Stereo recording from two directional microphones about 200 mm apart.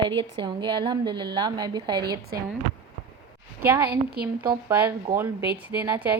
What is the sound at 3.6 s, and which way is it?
Speech, 10° right (ahead or behind).